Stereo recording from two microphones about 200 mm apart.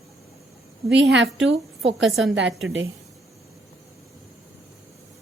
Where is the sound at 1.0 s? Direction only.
65° right (ahead or behind).